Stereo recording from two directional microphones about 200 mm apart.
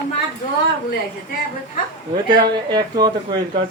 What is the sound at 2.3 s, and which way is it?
Speech, 20° right (ahead or behind).